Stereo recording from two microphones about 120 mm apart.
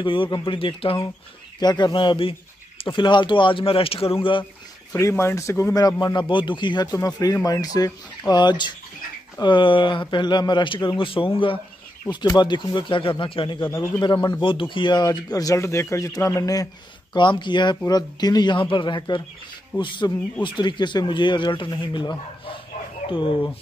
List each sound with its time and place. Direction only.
0.0 s a man's voice: 45° left (ahead or behind)
1.6 s a man's voice: 35° left (ahead or behind)
4.9 s a man's voice: 25° left (ahead or behind); by 13.7 s 45° left (ahead or behind)
13.9 s speech: 35° left (ahead or behind)
17.1 s a man's voice: 40° left (ahead or behind)